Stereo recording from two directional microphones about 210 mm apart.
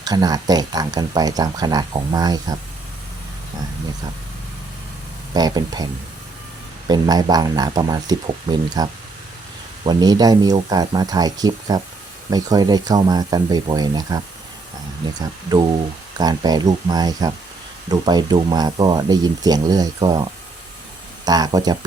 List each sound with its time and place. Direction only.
0.0 s speech: 20° right (ahead or behind)
5.3 s speech: 20° right (ahead or behind)
15.2 s speech: 20° right (ahead or behind)
21.2 s speech: 20° right (ahead or behind)